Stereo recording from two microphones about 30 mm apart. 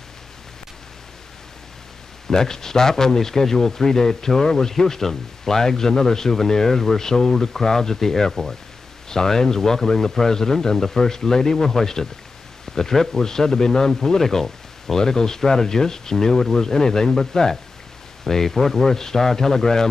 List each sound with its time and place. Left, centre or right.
2.2 s speech: centre
9.1 s speech: centre